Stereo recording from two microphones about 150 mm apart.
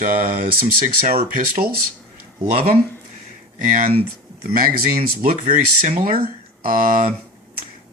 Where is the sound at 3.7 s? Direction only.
65° right (ahead or behind).